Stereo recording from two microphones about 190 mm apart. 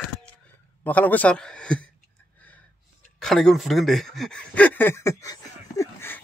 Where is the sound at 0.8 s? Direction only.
10° left (ahead or behind).